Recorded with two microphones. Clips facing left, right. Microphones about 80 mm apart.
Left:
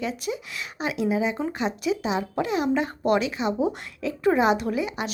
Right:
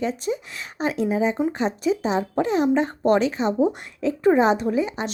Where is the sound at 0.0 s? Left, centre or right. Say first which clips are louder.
Right 4 dB; right.